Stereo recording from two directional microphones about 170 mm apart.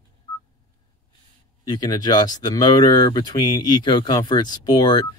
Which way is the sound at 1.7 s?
25° left (ahead or behind).